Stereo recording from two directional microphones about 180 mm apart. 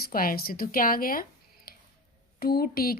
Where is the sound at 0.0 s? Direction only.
50° left (ahead or behind).